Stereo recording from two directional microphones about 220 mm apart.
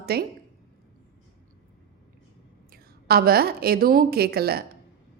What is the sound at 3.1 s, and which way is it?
A woman's voice, 45° right (ahead or behind).